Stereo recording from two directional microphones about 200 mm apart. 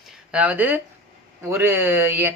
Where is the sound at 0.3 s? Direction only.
10° right (ahead or behind).